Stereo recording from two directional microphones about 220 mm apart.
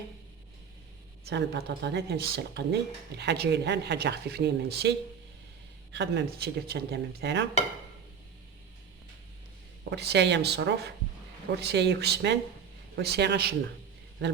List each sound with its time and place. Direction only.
1.2 s speech: 50° right (ahead or behind)
9.9 s speech: 50° right (ahead or behind)